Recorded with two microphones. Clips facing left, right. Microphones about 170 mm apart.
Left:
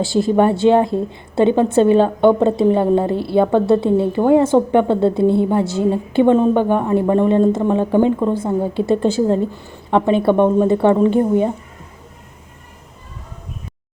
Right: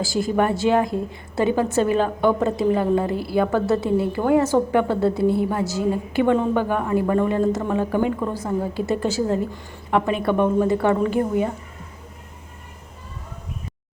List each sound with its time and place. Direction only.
0.0 s a woman's voice: 25° left (ahead or behind)